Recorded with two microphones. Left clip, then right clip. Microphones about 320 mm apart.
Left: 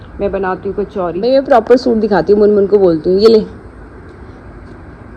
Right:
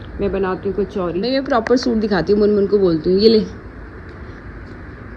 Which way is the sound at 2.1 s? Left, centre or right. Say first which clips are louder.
Left 6 dB; left.